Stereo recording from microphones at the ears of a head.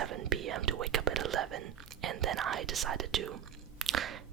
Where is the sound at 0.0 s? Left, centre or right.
Right.